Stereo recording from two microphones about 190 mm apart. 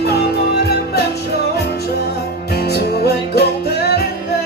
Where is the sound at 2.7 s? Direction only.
55° left (ahead or behind).